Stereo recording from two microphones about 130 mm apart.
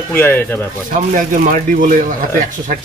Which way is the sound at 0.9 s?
85° right.